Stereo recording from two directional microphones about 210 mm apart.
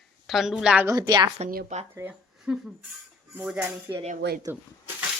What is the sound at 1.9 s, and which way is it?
Speech, 10° right (ahead or behind).